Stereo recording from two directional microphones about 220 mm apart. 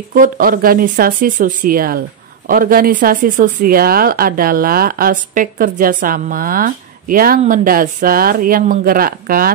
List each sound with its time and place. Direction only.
0.1 s speech: 40° right (ahead or behind)